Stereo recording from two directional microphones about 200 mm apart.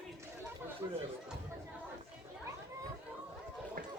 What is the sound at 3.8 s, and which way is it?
Run, 45° right (ahead or behind).